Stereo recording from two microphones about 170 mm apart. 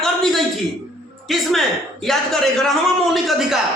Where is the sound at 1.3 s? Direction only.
Centre (ahead or behind).